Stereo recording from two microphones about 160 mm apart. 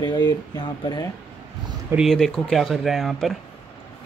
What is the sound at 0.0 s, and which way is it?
Speech, 25° left (ahead or behind).